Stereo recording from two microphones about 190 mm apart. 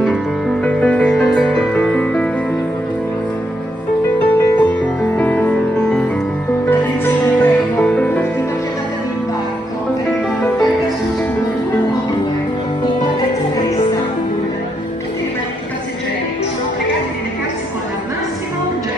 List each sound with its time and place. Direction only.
0.0 s music: centre (ahead or behind)
4.2 s music: 10° left (ahead or behind)
7.3 s music: 5° left (ahead or behind)